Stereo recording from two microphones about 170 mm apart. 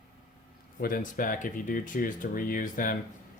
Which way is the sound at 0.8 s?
55° left (ahead or behind).